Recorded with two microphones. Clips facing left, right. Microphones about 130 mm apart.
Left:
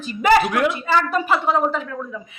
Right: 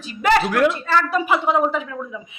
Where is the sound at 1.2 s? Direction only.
15° right (ahead or behind).